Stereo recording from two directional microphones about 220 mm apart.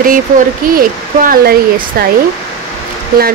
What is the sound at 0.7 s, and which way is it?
Speech, 40° right (ahead or behind).